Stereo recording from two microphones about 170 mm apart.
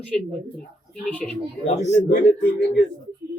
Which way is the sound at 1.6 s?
40° left (ahead or behind).